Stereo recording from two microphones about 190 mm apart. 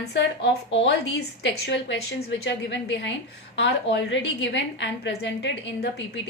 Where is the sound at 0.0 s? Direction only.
65° left (ahead or behind).